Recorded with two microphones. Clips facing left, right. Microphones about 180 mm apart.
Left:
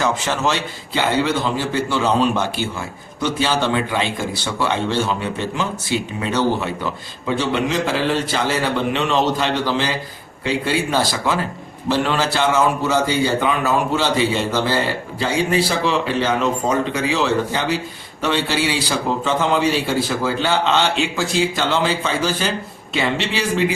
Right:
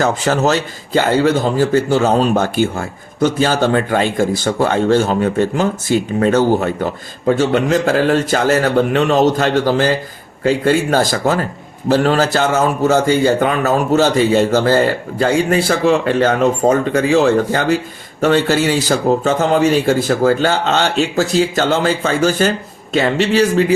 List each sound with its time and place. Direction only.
0.0 s speech: 40° right (ahead or behind)